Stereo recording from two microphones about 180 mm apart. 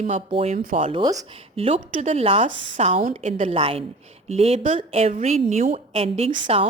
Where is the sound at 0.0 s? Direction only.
35° right (ahead or behind).